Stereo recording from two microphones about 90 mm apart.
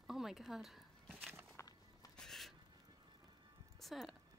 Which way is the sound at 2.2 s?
5° left (ahead or behind).